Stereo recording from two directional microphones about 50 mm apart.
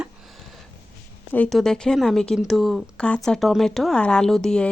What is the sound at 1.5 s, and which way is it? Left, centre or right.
Speech, centre.